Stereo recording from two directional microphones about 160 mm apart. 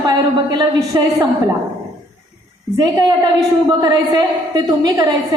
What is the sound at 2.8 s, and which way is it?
A woman's voice, 25° right (ahead or behind).